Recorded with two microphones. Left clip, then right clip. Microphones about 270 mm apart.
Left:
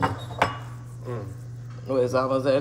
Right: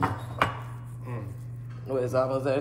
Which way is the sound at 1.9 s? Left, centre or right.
Left.